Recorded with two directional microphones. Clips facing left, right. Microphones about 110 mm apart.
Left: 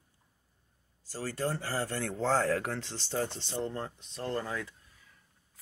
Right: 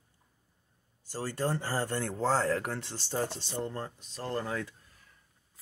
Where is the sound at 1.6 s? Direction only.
40° right (ahead or behind).